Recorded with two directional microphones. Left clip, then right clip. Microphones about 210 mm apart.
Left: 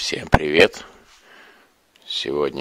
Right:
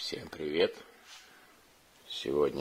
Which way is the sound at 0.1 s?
30° left (ahead or behind).